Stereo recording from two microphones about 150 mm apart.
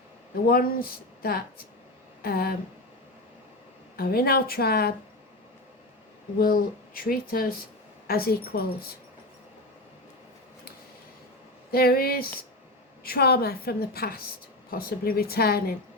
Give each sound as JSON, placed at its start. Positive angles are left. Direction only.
{"t": 0.4, "sound": "a woman's voice", "side_deg": 85}
{"t": 3.9, "sound": "a woman's voice", "side_deg": 90}
{"t": 6.4, "sound": "speech", "side_deg": 75}
{"t": 8.0, "sound": "a woman's voice", "side_deg": 90}
{"t": 11.7, "sound": "a woman's voice", "side_deg": 90}